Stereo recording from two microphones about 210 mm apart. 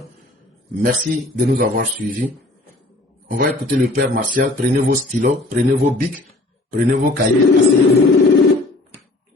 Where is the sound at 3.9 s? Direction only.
40° right (ahead or behind).